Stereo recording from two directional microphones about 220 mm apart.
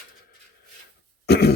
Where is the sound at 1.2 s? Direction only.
45° left (ahead or behind).